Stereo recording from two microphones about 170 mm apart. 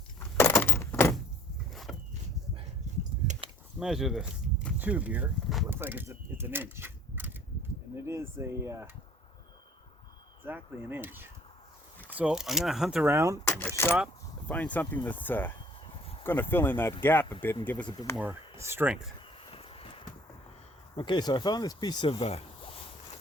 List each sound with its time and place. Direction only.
0.3 s a sound: 15° left (ahead or behind)
1.7 s a sound: centre (ahead or behind)
3.8 s speech: centre (ahead or behind)
10.4 s speech: 10° right (ahead or behind)
13.1 s speech: 15° right (ahead or behind)
13.4 s speech: 10° left (ahead or behind)
18.2 s speech: 15° right (ahead or behind)
19.5 s a sound: 35° left (ahead or behind)
20.9 s speech: 25° left (ahead or behind)